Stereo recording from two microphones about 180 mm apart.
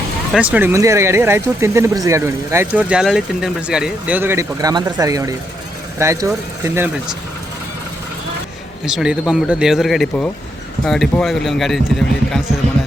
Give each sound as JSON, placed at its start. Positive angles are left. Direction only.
{"t": 0.3, "sound": "speech", "side_deg": -10}
{"t": 8.8, "sound": "speech", "side_deg": -5}